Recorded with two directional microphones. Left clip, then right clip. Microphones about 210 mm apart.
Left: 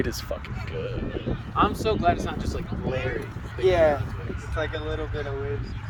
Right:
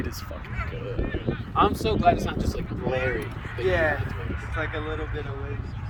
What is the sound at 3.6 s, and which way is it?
Speech, 40° left (ahead or behind).